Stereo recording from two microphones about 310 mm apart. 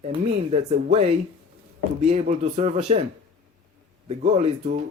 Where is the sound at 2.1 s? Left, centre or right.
Right.